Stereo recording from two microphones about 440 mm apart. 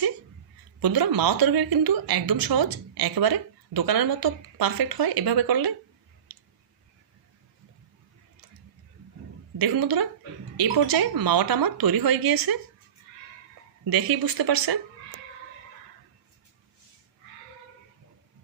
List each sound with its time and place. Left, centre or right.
0.8 s a woman's voice: right
9.6 s a woman's voice: right
13.9 s a woman's voice: right